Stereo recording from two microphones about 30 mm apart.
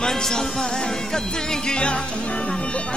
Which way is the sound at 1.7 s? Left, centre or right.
Left.